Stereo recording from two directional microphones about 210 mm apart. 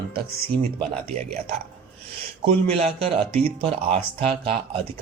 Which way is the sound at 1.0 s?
30° right (ahead or behind).